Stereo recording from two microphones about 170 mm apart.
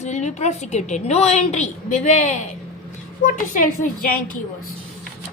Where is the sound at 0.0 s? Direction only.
40° left (ahead or behind).